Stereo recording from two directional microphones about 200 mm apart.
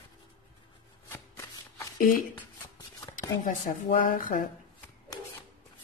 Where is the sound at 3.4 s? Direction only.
40° left (ahead or behind).